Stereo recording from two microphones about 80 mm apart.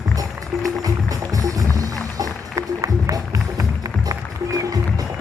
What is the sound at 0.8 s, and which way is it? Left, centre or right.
Music, right.